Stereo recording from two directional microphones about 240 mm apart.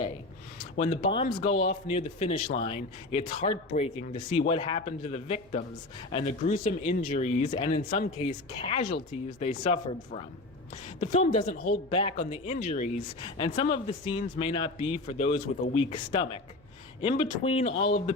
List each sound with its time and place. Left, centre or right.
0.8 s speech: left